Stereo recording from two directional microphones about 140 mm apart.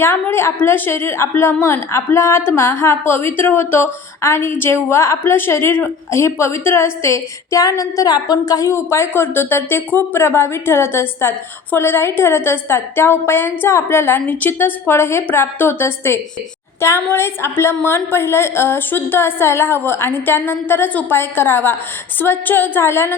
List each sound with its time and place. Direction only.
0.0 s a woman's voice: 15° left (ahead or behind)